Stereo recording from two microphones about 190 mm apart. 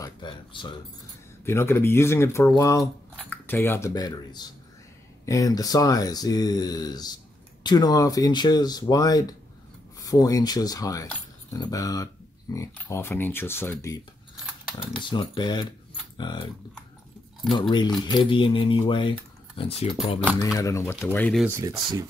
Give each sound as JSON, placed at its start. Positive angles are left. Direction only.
{"t": 0.0, "sound": "a sound", "side_deg": 25}
{"t": 1.4, "sound": "speech", "side_deg": 15}
{"t": 2.8, "sound": "speech", "side_deg": 5}
{"t": 14.3, "sound": "a sound", "side_deg": -5}
{"t": 14.8, "sound": "speech", "side_deg": 25}
{"t": 17.5, "sound": "speech", "side_deg": 25}
{"t": 20.5, "sound": "speech", "side_deg": 15}
{"t": 21.5, "sound": "speech", "side_deg": -15}